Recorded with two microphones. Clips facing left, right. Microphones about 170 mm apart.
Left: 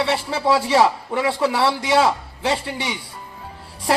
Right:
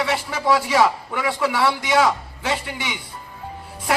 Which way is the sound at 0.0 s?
30° left (ahead or behind).